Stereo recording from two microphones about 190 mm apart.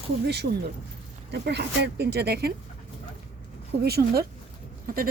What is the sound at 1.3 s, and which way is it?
Speech, 60° right (ahead or behind).